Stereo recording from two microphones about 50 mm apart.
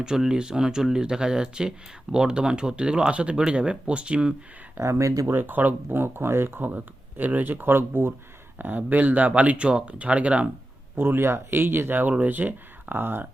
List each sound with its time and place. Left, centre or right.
0.0 s speech: centre
4.8 s speech: right
5.3 s speech: right
6.7 s speech: right
8.5 s speech: right
10.9 s speech: right